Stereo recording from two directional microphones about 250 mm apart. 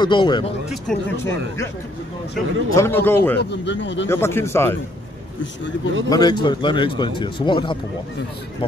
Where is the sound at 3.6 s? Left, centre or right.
Left.